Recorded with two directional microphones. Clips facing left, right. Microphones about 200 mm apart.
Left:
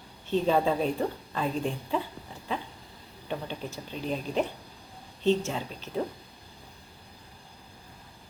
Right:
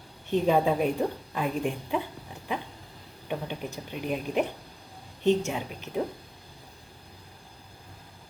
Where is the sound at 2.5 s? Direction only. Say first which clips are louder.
Right 1 dB; 15° right (ahead or behind).